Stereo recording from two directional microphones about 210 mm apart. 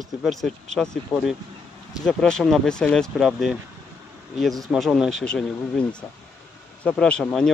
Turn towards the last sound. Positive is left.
turn(degrees=5)  # may be behind; listen again after turning